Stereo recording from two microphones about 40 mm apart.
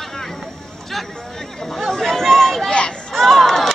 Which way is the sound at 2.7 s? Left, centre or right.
Left.